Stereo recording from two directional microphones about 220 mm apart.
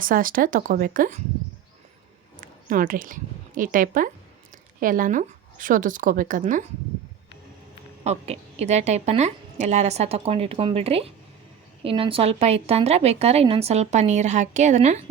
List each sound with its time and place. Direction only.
0.0 s a woman's voice: 40° right (ahead or behind)
2.4 s a woman's voice: 40° right (ahead or behind)
8.0 s a woman's voice: 30° right (ahead or behind)